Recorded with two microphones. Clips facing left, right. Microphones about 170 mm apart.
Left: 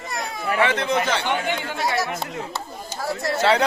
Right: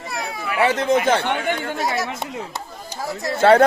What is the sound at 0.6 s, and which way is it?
Speech, 40° right (ahead or behind).